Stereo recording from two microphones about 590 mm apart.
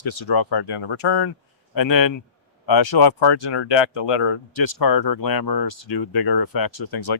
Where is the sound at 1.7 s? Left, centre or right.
Left.